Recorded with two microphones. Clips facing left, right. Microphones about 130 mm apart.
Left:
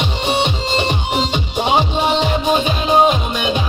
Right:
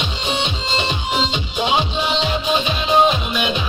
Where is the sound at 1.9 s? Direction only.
55° left (ahead or behind).